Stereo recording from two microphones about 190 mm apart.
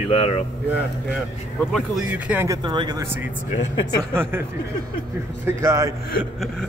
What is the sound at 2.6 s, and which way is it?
Speech, 20° right (ahead or behind).